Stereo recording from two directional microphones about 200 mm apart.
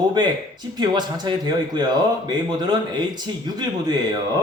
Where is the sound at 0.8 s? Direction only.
20° right (ahead or behind).